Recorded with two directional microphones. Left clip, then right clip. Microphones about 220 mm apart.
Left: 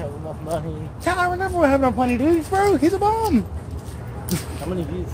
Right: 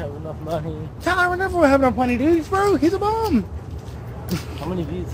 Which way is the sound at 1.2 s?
20° right (ahead or behind).